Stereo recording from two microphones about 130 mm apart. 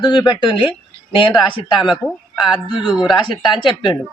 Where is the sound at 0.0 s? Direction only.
35° left (ahead or behind).